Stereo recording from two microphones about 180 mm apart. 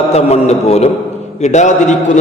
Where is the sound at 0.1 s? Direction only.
35° left (ahead or behind).